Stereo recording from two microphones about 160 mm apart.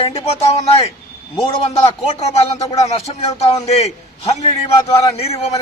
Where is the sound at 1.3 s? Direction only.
35° left (ahead or behind).